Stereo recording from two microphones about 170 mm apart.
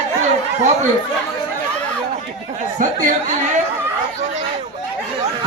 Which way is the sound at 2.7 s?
45° right (ahead or behind).